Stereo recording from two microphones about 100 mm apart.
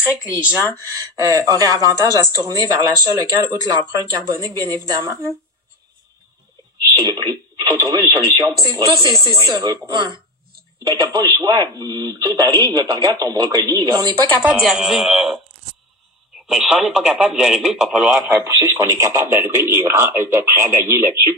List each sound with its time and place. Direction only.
0.1 s speech: 10° right (ahead or behind)
1.1 s speech: 30° right (ahead or behind)
6.8 s speech: 45° right (ahead or behind)
11.0 s speech: 40° right (ahead or behind)
14.4 s a man's voice: 10° right (ahead or behind)
16.4 s a man's voice: 5° right (ahead or behind)
18.4 s a man's voice: 25° right (ahead or behind)